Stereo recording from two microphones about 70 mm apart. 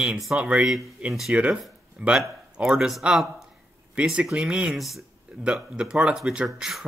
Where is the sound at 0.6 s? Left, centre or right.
Centre.